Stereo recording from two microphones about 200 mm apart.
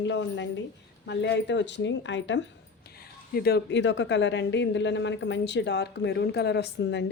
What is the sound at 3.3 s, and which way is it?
Speech, 50° left (ahead or behind).